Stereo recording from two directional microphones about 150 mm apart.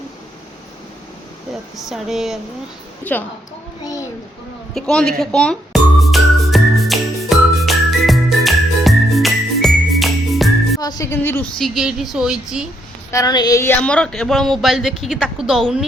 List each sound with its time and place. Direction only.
1.7 s a woman's voice: centre (ahead or behind)
3.0 s a woman's voice: 10° left (ahead or behind)
4.7 s music: 5° left (ahead or behind)
10.8 s speech: 25° left (ahead or behind)
11.5 s a woman's voice: centre (ahead or behind)
13.1 s speech: 25° left (ahead or behind)
13.8 s a woman's voice: 5° left (ahead or behind)